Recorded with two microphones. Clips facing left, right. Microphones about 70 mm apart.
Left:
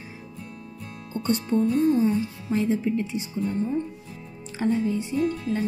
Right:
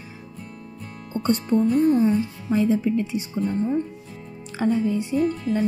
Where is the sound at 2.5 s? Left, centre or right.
Right.